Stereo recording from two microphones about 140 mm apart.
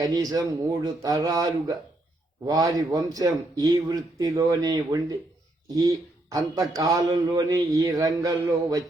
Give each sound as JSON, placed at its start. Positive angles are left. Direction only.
{"t": 0.0, "sound": "a man's voice", "side_deg": -25}